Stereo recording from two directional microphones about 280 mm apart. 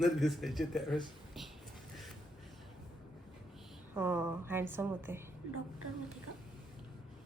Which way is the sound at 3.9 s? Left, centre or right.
Centre.